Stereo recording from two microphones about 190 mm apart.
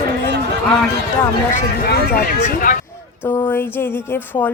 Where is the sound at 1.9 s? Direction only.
45° left (ahead or behind).